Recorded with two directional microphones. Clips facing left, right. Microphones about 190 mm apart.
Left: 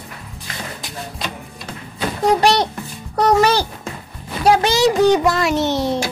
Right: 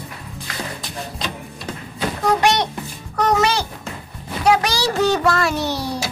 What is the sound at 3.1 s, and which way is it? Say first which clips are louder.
Music: left 4 dB; 30° left (ahead or behind).